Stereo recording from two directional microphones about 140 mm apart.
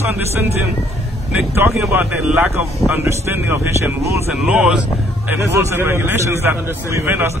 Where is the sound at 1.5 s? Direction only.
15° right (ahead or behind).